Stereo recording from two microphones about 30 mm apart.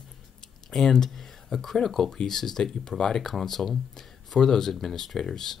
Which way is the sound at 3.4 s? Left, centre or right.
Centre.